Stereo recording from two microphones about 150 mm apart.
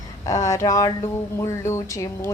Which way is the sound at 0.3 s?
20° left (ahead or behind).